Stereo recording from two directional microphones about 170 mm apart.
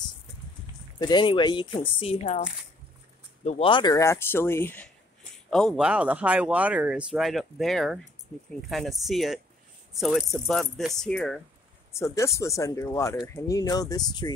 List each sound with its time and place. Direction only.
0.9 s speech: 25° left (ahead or behind)
3.4 s speech: 35° left (ahead or behind); by 4.8 s 10° left (ahead or behind)
5.5 s speech: centre (ahead or behind)
11.9 s speech: 15° left (ahead or behind)